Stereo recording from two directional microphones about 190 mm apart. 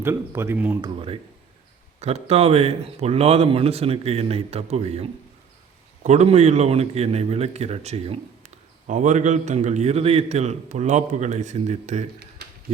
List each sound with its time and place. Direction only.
0.0 s speech: 10° right (ahead or behind)
0.8 s speech: 30° right (ahead or behind)